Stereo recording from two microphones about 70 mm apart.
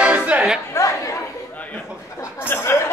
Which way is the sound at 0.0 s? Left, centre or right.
Centre.